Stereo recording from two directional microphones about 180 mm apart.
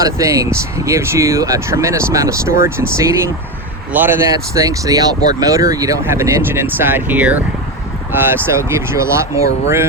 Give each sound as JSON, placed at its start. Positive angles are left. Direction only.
{"t": 0.0, "sound": "speech", "side_deg": -15}